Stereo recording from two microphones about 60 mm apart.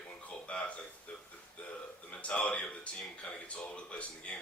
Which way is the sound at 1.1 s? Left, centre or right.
Left.